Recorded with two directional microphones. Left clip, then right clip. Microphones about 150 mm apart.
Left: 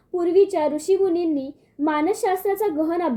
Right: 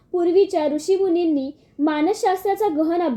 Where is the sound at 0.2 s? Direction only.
25° right (ahead or behind).